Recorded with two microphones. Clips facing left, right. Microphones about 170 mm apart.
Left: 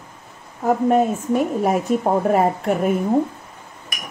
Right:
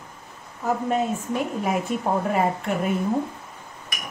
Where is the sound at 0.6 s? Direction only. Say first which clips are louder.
Left 7 dB; 50° left (ahead or behind).